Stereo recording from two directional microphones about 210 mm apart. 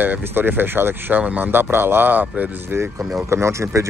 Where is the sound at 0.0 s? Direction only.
10° right (ahead or behind).